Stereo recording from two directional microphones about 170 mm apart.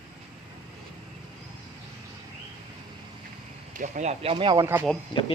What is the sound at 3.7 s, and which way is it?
Speech, 45° right (ahead or behind).